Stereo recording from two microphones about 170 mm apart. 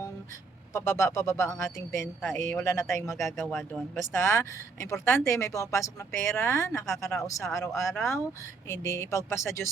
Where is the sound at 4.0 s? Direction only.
15° left (ahead or behind).